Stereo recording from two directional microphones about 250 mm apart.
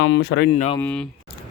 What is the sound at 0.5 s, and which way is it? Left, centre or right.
Speech, left.